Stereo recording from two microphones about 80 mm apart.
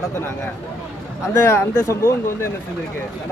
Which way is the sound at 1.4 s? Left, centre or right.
Left.